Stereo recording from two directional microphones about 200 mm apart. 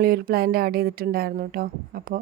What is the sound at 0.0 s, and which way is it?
A woman's voice, 50° right (ahead or behind).